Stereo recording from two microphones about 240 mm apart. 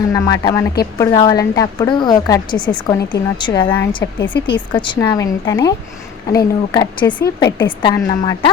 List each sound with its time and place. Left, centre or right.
0.1 s a woman's voice: centre